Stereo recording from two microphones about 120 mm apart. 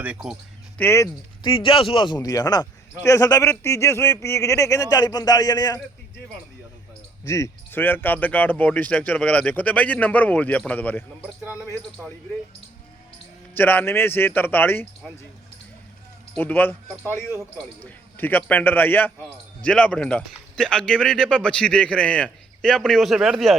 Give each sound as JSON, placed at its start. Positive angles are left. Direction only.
{"t": 0.0, "sound": "speech", "side_deg": -10}
{"t": 0.8, "sound": "speech", "side_deg": 20}
{"t": 1.5, "sound": "speech", "side_deg": 45}
{"t": 7.3, "sound": "speech", "side_deg": 25}
{"t": 13.6, "sound": "speech", "side_deg": 15}
{"t": 16.3, "sound": "speech", "side_deg": 15}